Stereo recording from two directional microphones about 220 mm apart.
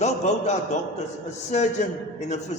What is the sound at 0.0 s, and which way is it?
Speech, 30° left (ahead or behind).